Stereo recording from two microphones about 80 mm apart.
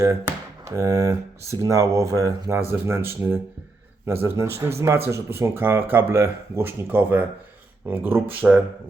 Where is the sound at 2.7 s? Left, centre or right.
Right.